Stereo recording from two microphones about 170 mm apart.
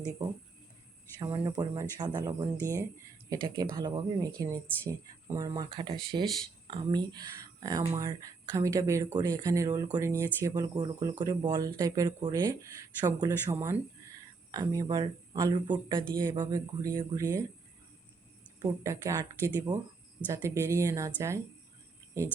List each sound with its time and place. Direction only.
1.2 s speech: 25° right (ahead or behind)
18.6 s speech: 20° right (ahead or behind)